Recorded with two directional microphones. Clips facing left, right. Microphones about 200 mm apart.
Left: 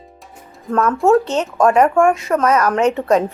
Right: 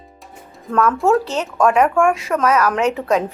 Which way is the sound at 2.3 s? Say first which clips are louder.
Left 2 dB; 20° left (ahead or behind).